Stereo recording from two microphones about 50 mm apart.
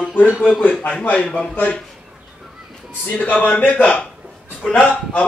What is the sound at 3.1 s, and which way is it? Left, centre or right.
A man's voice, left.